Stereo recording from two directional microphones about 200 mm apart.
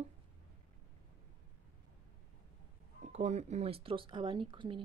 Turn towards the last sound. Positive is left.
turn(degrees=-25)  # may be behind; listen again after turning